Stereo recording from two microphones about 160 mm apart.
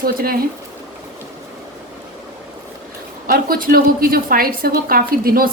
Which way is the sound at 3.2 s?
65° right (ahead or behind).